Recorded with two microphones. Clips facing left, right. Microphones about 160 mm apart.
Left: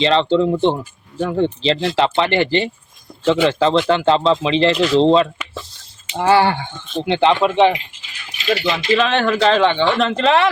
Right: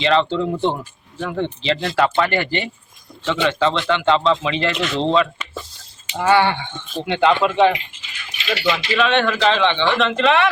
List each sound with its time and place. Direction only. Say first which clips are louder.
0.0 s speech: left 3 dB; 30° left (ahead or behind)
7.0 s speech: left 2 dB; 30° left (ahead or behind)
8.1 s speech: left 5 dB; 40° left (ahead or behind)